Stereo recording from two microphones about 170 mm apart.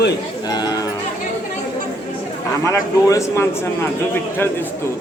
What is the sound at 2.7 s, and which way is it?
Speech, 15° left (ahead or behind).